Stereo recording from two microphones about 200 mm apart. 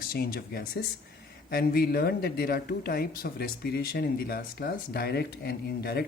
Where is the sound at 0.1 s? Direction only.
50° left (ahead or behind).